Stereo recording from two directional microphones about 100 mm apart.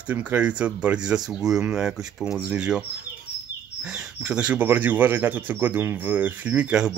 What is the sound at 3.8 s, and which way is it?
Speech, 5° right (ahead or behind).